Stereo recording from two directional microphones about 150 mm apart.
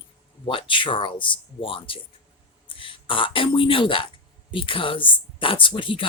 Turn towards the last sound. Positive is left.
turn(degrees=35)  # may be behind; listen again after turning